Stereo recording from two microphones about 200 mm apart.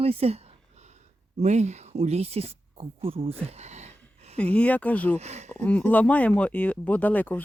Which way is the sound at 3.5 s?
35° right (ahead or behind).